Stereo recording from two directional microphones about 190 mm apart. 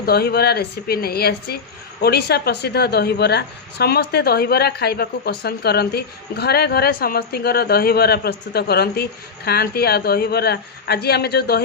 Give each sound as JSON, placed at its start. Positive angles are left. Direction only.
{"t": 0.0, "sound": "a woman's voice", "side_deg": 55}